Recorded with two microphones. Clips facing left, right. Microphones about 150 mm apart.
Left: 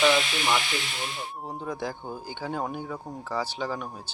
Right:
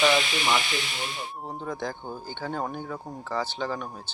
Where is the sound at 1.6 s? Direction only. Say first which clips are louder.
Even; 5° left (ahead or behind).